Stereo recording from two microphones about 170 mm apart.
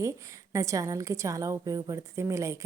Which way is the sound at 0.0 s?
20° right (ahead or behind).